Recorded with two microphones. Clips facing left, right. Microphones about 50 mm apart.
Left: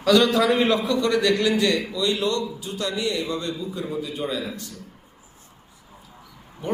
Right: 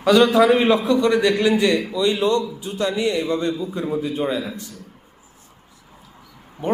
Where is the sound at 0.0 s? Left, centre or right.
Centre.